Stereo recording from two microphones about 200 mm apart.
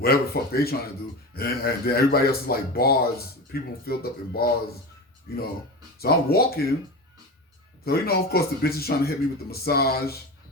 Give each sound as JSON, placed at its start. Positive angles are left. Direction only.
{"t": 0.0, "sound": "speech", "side_deg": 50}
{"t": 6.0, "sound": "speech", "side_deg": 50}
{"t": 7.9, "sound": "speech", "side_deg": 50}